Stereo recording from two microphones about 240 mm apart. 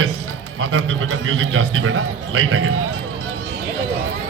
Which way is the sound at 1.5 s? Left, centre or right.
Right.